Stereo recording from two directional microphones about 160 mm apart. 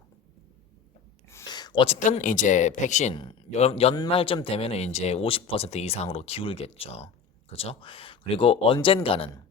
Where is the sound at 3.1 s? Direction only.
30° left (ahead or behind).